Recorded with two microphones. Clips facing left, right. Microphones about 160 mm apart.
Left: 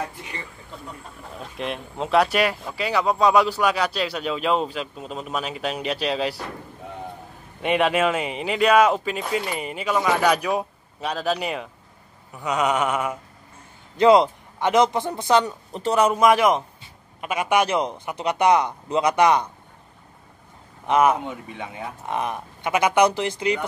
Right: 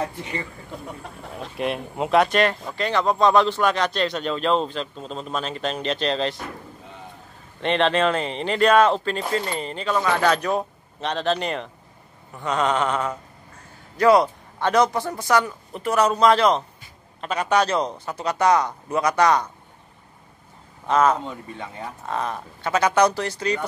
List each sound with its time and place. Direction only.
1.6 s speech: 5° right (ahead or behind)
7.6 s speech: 10° left (ahead or behind)
13.9 s speech: 20° left (ahead or behind)
20.8 s speech: 15° left (ahead or behind)